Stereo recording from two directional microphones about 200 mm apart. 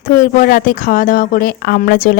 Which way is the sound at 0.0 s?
40° left (ahead or behind).